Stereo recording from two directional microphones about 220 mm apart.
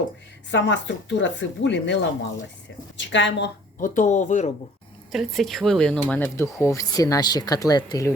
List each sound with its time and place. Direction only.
0.5 s speech: 55° left (ahead or behind)
3.1 s a woman's voice: 55° left (ahead or behind)
3.8 s speech: 35° left (ahead or behind)
5.1 s speech: centre (ahead or behind); by 8.1 s 15° left (ahead or behind)